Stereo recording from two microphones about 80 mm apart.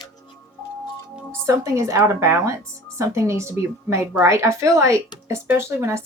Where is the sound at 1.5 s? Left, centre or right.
Right.